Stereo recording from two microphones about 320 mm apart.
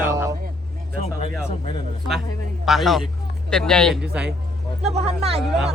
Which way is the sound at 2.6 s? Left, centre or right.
Centre.